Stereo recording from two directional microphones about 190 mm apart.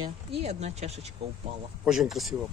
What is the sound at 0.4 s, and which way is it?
Speech, 35° right (ahead or behind).